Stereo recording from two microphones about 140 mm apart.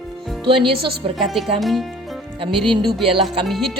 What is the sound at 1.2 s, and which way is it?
Speech, centre (ahead or behind).